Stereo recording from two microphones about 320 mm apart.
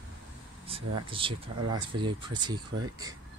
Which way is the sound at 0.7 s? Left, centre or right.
Centre.